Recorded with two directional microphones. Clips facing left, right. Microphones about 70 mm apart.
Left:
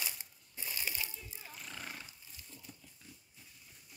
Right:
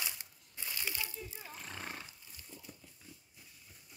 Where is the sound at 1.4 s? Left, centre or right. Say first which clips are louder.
Left 1 dB; right.